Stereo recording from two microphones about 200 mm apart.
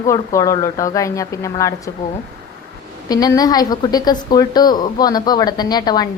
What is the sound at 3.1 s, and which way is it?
A woman's voice, 20° left (ahead or behind).